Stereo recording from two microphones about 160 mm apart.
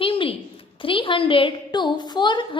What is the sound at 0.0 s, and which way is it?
A woman's voice, 35° left (ahead or behind).